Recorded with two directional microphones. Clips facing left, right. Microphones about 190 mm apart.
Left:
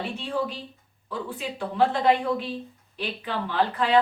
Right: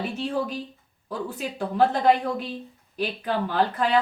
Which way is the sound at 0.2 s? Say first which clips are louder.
Right 2 dB; 45° right (ahead or behind).